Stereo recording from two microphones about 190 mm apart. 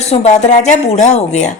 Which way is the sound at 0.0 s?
35° left (ahead or behind).